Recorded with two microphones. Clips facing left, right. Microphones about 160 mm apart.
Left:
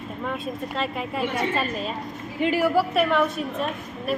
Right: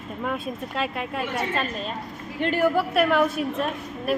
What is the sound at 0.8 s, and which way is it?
A woman's voice, centre (ahead or behind).